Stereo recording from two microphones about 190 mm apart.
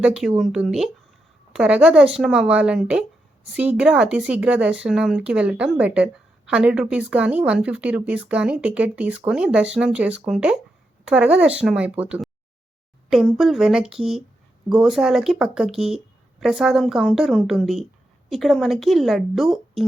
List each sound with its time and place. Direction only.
0.0 s speech: 5° right (ahead or behind)